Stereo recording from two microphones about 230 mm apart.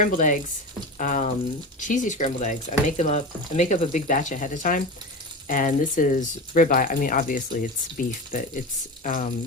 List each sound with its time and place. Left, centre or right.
0.0 s speech: left